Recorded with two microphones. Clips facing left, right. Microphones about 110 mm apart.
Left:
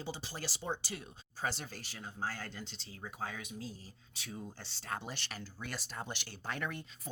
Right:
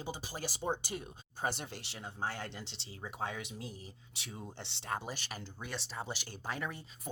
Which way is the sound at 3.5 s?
70° right (ahead or behind).